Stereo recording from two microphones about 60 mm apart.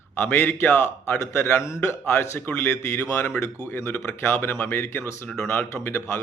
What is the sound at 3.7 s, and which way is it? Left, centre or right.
Speech, left.